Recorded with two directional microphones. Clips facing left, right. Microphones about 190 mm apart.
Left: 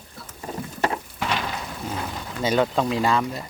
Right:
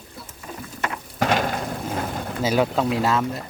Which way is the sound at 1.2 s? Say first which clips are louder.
Right 9 dB; 45° right (ahead or behind).